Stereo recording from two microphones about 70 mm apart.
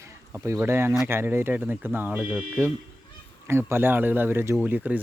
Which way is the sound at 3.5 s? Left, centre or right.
Right.